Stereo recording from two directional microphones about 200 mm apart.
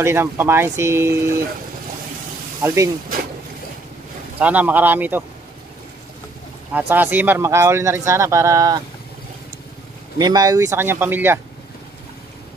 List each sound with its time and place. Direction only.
0.0 s speech: 10° right (ahead or behind)
2.6 s speech: 15° right (ahead or behind)
4.4 s speech: 5° right (ahead or behind)
6.7 s speech: 10° right (ahead or behind)
10.1 s speech: 20° right (ahead or behind)